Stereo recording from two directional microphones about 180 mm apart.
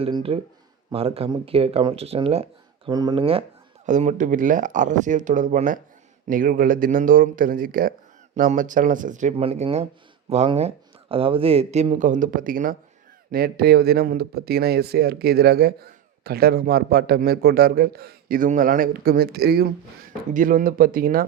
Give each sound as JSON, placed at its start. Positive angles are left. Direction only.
{"t": 0.0, "sound": "speech", "side_deg": -30}
{"t": 2.9, "sound": "speech", "side_deg": -20}
{"t": 3.8, "sound": "speech", "side_deg": -45}
{"t": 20.3, "sound": "speech", "side_deg": -45}